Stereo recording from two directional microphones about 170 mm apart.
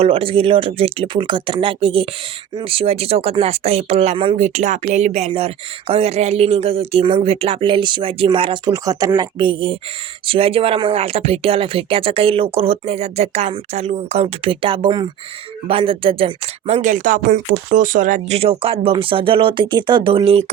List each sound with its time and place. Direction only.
0.0 s speech: 35° right (ahead or behind)